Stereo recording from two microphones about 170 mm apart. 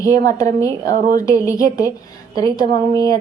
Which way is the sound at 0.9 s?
55° right (ahead or behind).